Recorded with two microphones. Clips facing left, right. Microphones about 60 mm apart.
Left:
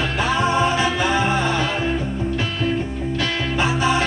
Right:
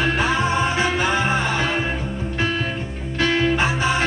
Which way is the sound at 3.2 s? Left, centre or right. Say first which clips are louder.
Right 5 dB; right.